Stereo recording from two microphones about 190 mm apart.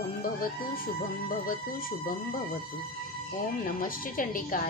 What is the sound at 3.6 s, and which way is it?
A woman's voice, 50° left (ahead or behind).